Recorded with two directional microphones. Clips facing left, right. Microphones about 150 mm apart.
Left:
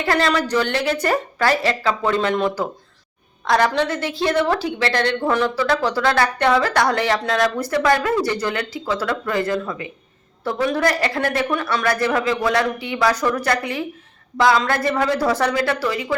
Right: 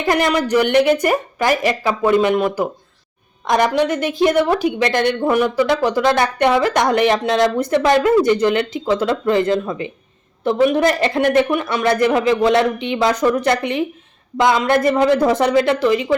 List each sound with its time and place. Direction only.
0.0 s a woman's voice: 20° right (ahead or behind)